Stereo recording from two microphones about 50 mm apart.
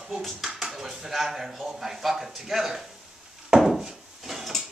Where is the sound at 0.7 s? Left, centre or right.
Centre.